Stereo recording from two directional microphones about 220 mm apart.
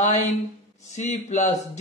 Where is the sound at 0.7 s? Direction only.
30° left (ahead or behind).